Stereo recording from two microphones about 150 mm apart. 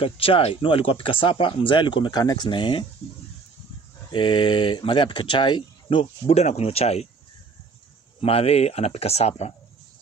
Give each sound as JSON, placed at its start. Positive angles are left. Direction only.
{"t": 0.0, "sound": "speech", "side_deg": 40}
{"t": 4.1, "sound": "speech", "side_deg": 35}
{"t": 8.2, "sound": "speech", "side_deg": 40}